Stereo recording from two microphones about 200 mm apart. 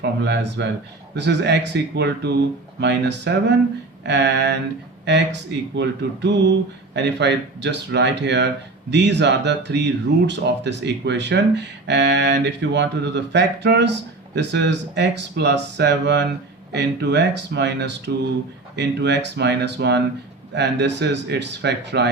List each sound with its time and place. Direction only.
0.0 s speech: 60° right (ahead or behind)